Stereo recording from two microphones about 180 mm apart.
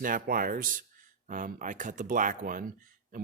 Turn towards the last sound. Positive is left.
turn(degrees=-50)  # may be behind; listen again after turning